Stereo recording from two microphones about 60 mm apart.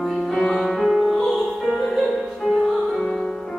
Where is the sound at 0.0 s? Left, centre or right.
Centre.